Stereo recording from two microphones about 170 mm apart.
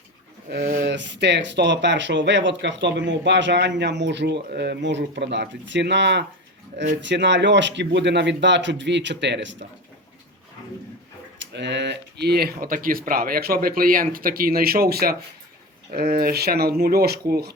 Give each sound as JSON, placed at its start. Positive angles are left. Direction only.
{"t": 0.5, "sound": "speech", "side_deg": -70}
{"t": 11.3, "sound": "speech", "side_deg": -90}